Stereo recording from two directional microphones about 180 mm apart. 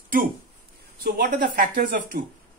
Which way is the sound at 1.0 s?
55° right (ahead or behind).